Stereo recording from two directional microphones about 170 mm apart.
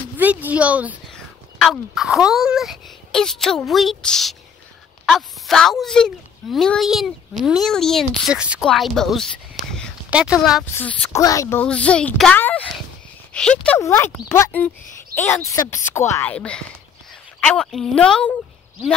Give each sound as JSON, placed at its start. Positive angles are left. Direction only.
{"t": 0.2, "sound": "speech", "side_deg": -10}
{"t": 1.1, "sound": "speech", "side_deg": 0}
{"t": 10.7, "sound": "a child's voice", "side_deg": 10}
{"t": 13.7, "sound": "a child's voice", "side_deg": 15}